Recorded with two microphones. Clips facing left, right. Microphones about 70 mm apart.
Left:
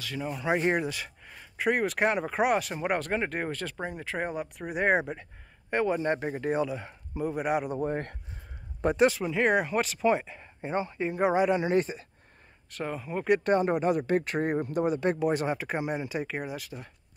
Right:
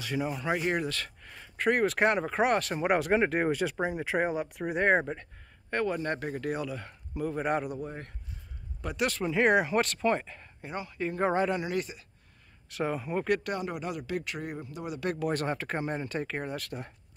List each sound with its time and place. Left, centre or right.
0.2 s speech: centre
0.5 s speech: centre
2.8 s speech: centre
5.7 s a man's voice: centre
7.8 s speech: left
9.2 s speech: centre
10.6 s a man's voice: left
11.1 s speech: centre
11.6 s speech: left
12.6 s speech: centre
13.4 s speech: left
14.9 s a man's voice: left
15.4 s speech: centre